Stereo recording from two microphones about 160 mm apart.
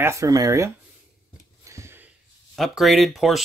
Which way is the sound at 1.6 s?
20° right (ahead or behind).